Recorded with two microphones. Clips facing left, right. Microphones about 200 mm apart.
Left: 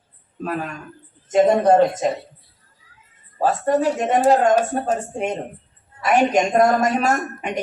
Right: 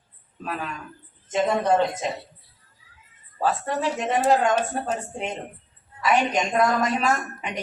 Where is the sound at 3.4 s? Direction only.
45° left (ahead or behind).